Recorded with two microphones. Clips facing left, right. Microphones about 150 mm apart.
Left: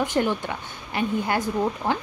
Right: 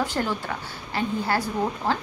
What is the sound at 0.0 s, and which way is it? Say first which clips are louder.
A woman's voice: left 3 dB; 20° left (ahead or behind).